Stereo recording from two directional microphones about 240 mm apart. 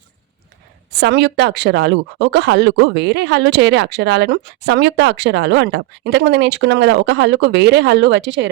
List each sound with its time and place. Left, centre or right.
0.9 s speech: right